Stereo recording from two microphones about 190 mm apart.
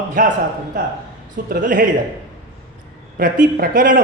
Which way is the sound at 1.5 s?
45° right (ahead or behind).